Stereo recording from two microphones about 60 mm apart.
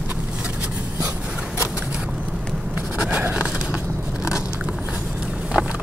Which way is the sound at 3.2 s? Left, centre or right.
Right.